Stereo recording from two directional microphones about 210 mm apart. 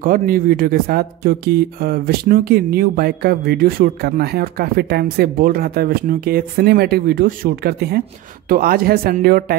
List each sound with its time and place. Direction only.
0.0 s speech: 40° right (ahead or behind)